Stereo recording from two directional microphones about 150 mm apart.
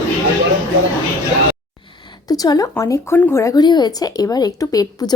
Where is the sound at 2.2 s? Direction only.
25° left (ahead or behind).